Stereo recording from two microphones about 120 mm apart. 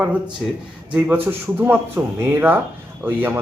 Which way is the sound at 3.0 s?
15° right (ahead or behind).